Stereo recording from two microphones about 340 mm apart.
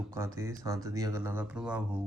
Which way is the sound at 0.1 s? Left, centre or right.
Centre.